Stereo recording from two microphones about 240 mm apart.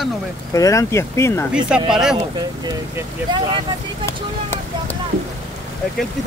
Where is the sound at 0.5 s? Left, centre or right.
Centre.